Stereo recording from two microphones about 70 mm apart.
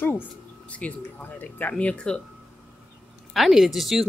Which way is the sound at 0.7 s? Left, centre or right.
Centre.